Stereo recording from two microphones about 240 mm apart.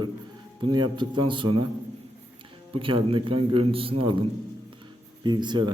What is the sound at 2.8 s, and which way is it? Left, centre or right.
A man's voice, right.